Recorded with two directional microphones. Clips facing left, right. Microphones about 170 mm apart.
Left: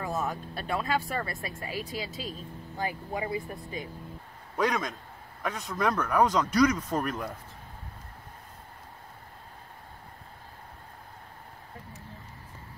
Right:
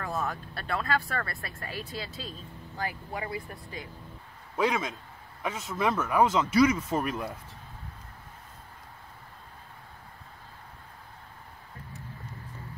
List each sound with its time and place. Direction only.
0.0 s speech: 20° left (ahead or behind)
4.6 s speech: 5° right (ahead or behind)